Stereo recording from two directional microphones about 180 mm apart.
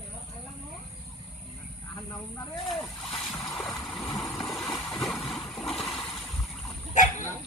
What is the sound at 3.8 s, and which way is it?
Vehicle, 5° left (ahead or behind).